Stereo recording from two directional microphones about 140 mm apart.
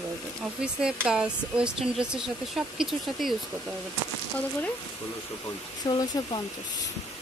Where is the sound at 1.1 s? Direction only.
5° right (ahead or behind).